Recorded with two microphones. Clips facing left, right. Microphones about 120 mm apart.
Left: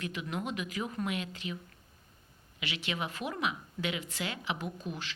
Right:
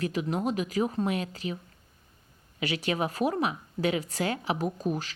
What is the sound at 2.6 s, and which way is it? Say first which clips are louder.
A woman's voice: right 8 dB; 40° right (ahead or behind).